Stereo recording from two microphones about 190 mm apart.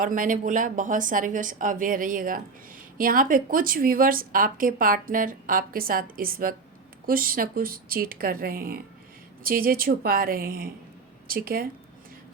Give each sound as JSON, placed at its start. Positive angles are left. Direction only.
{"t": 0.0, "sound": "a woman's voice", "side_deg": -45}